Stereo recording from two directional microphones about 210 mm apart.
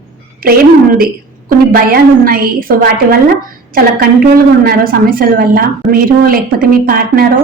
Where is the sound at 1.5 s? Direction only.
45° right (ahead or behind).